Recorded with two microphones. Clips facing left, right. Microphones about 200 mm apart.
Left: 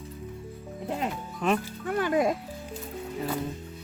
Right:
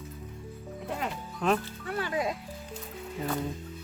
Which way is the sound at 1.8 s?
45° left (ahead or behind).